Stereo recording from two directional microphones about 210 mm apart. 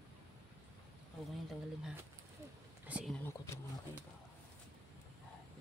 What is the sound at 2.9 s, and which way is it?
Speech, 5° right (ahead or behind).